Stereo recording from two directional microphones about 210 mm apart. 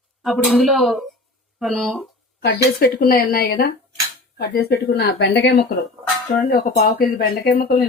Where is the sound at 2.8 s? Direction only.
45° left (ahead or behind).